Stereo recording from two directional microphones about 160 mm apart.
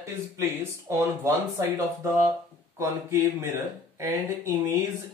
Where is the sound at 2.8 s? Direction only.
20° right (ahead or behind).